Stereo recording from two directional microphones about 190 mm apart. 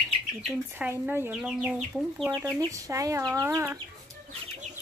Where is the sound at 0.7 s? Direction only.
10° right (ahead or behind).